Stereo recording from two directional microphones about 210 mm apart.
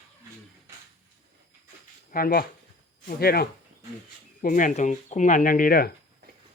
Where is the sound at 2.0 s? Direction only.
45° left (ahead or behind).